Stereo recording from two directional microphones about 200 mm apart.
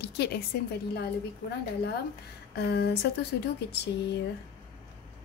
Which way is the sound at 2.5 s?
50° left (ahead or behind).